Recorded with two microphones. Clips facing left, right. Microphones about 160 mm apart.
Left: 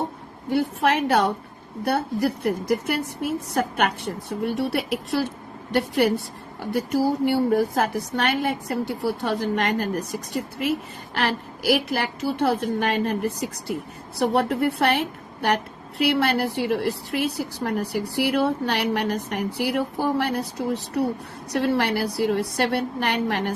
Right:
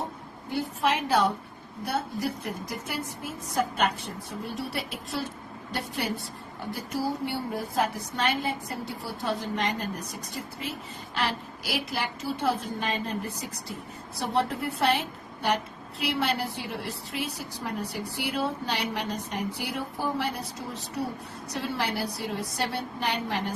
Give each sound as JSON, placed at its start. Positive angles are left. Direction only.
{"t": 0.5, "sound": "a woman's voice", "side_deg": 70}
{"t": 21.5, "sound": "a woman's voice", "side_deg": 65}